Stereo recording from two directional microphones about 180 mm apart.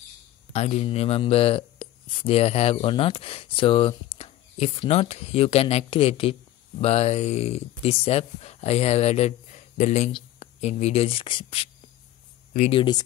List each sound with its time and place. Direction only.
0.5 s speech: 35° left (ahead or behind)
12.7 s speech: 25° left (ahead or behind)